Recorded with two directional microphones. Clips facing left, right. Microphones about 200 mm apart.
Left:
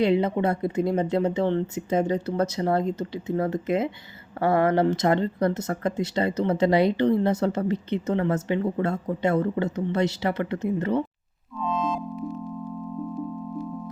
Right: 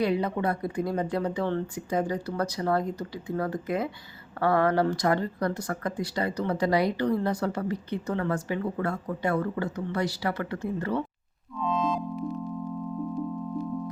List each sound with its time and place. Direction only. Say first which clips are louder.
0.0 s speech: left 4 dB; 25° left (ahead or behind)
11.6 s music: even; centre (ahead or behind)